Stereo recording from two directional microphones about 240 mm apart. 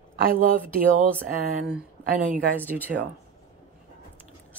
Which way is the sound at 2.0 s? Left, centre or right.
Right.